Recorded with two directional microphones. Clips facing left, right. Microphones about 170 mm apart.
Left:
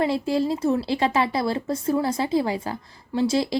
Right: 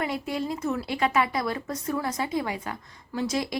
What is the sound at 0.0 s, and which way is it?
Speech, 30° left (ahead or behind).